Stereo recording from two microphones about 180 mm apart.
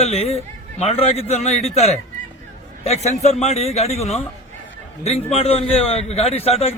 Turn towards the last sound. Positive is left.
turn(degrees=35)  # may be behind; listen again after turning